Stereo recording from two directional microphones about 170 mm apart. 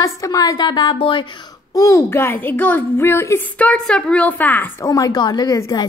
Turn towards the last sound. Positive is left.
turn(degrees=20)  # may be behind; listen again after turning